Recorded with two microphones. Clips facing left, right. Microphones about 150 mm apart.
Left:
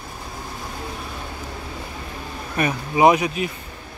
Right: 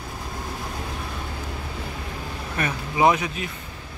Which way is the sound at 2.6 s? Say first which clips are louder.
Left 4 dB; 20° left (ahead or behind).